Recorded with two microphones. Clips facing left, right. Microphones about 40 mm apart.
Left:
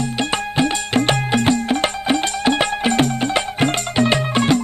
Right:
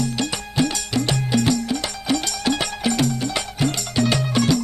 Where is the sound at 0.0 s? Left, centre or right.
Left.